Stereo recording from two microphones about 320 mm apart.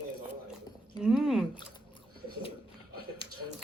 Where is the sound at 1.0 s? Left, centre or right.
Centre.